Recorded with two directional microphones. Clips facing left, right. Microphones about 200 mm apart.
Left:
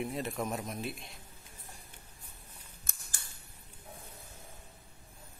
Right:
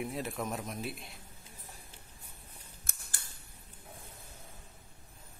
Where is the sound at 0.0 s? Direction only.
Centre (ahead or behind).